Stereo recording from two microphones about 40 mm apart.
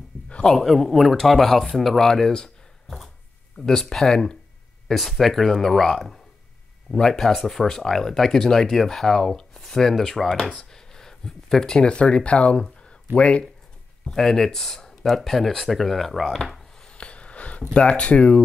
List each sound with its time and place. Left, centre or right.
0.6 s speech: centre
10.7 s a sound: centre
11.8 s speech: left
12.8 s a sound: left
14.0 s speech: centre
16.9 s wheeze: left
17.7 s speech: left